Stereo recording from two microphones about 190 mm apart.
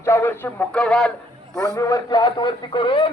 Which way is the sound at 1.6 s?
15° left (ahead or behind).